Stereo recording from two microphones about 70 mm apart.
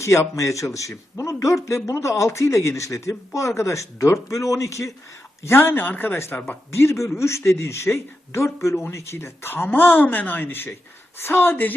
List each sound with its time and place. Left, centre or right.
0.0 s a man's voice: left
5.4 s speech: left
6.3 s speech: centre
6.7 s a man's voice: left